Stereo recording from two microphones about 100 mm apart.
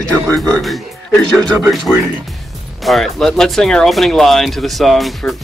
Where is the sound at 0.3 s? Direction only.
5° left (ahead or behind).